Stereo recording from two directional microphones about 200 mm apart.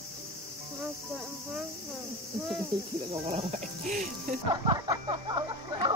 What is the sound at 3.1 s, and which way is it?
Speech, 30° right (ahead or behind).